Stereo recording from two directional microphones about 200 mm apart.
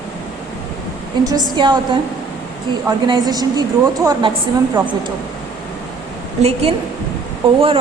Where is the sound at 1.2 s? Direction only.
20° right (ahead or behind).